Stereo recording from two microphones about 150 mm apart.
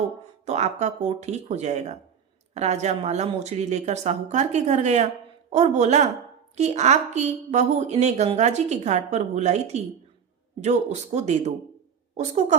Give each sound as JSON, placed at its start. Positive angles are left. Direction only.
{"t": 0.4, "sound": "a woman's voice", "side_deg": -50}